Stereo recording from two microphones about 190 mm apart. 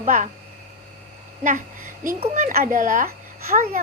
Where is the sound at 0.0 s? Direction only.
45° right (ahead or behind).